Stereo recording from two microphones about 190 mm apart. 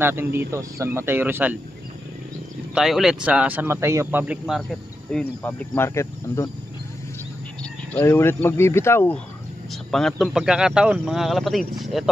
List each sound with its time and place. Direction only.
0.0 s speech: 10° right (ahead or behind)
2.7 s a man's voice: centre (ahead or behind); by 6.5 s 15° left (ahead or behind)
7.9 s a man's voice: 10° left (ahead or behind)